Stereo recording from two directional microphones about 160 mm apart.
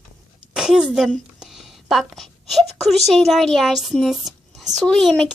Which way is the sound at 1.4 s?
Centre (ahead or behind).